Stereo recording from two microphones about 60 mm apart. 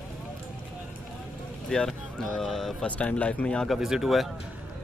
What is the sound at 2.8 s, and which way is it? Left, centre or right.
Speech, left.